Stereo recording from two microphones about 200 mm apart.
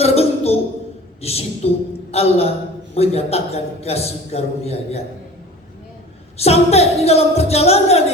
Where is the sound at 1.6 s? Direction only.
30° left (ahead or behind).